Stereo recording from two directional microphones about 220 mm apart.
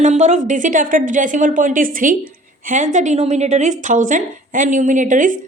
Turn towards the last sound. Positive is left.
turn(degrees=-35)  # may be behind; listen again after turning